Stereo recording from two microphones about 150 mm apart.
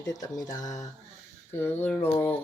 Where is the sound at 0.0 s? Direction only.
25° left (ahead or behind).